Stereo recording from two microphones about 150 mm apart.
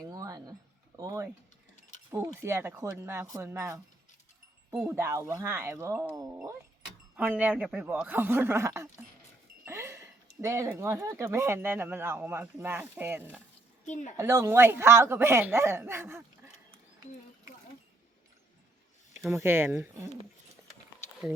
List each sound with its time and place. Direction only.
0.0 s a sound: 25° right (ahead or behind)
0.9 s mechanisms: 20° right (ahead or behind)
2.0 s speech: 20° right (ahead or behind)
4.9 s speech: 15° right (ahead or behind)
13.8 s a woman's voice: 55° left (ahead or behind)
14.2 s speech: 20° right (ahead or behind)
19.2 s speech: 15° right (ahead or behind)